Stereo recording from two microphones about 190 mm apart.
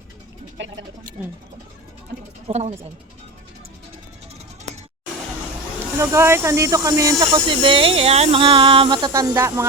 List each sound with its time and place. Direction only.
2.5 s speech: 35° right (ahead or behind)
6.0 s speech: 15° right (ahead or behind)